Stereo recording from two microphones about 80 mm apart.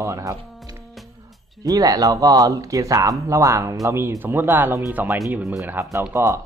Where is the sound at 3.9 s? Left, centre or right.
Right.